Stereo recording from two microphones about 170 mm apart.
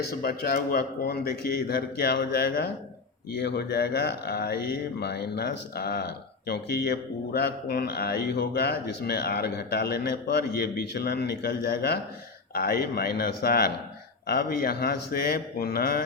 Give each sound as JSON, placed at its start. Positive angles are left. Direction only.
{"t": 0.1, "sound": "a man's voice", "side_deg": 65}